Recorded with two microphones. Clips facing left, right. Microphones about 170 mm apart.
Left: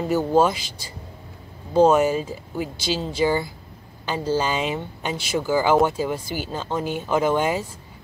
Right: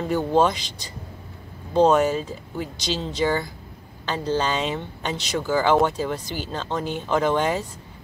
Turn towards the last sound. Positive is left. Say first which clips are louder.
# left 1 dB
turn(degrees=10)  # may be behind; listen again after turning